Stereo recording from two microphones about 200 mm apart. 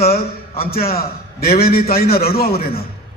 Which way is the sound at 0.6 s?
50° left (ahead or behind).